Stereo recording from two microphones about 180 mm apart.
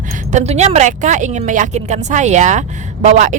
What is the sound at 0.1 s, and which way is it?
A woman's voice, 40° right (ahead or behind).